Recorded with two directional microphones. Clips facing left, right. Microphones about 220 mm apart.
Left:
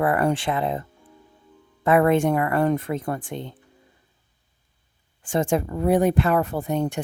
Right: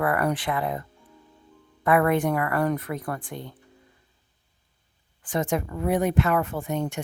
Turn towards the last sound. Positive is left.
turn(degrees=35)  # may be behind; listen again after turning